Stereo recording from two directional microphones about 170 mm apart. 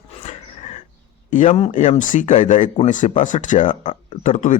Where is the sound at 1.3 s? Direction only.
45° left (ahead or behind).